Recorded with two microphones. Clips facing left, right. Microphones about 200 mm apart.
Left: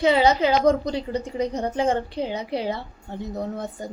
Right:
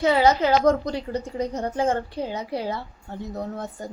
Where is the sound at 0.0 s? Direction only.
20° left (ahead or behind).